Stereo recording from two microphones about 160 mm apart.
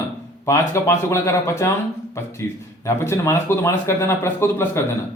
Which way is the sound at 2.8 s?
20° left (ahead or behind).